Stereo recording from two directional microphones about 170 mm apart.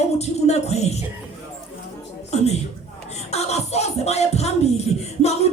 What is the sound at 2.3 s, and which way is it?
Music, 40° left (ahead or behind).